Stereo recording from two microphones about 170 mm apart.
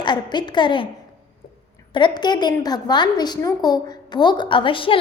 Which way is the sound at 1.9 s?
25° left (ahead or behind).